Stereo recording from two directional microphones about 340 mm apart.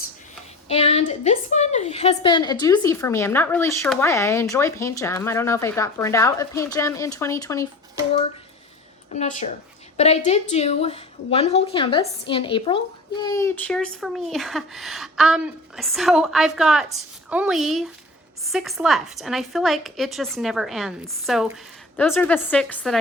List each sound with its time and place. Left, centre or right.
0.7 s a woman's voice: centre
9.1 s a woman's voice: left; by 23.0 s centre